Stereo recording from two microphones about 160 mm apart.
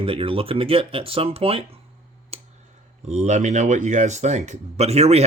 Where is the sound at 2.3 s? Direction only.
40° right (ahead or behind).